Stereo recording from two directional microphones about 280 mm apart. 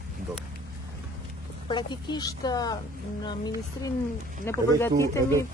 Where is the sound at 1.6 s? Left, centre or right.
Centre.